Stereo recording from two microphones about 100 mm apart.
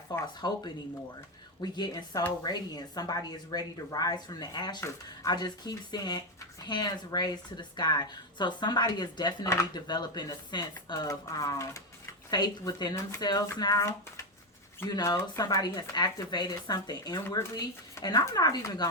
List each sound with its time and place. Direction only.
0.1 s speech: 40° left (ahead or behind)
1.6 s a woman's voice: 45° left (ahead or behind)
12.3 s speech: 45° left (ahead or behind)
17.4 s speech: 25° left (ahead or behind)
18.0 s speech: 40° left (ahead or behind)